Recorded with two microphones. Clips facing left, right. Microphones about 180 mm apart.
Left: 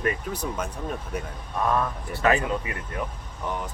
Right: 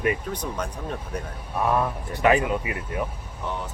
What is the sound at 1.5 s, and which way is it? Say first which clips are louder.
Speech: right 2 dB; 10° right (ahead or behind).